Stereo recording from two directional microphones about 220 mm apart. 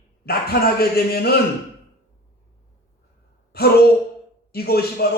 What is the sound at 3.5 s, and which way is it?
Speech, 45° left (ahead or behind).